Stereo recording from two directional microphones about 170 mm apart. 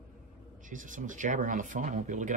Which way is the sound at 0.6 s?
50° right (ahead or behind).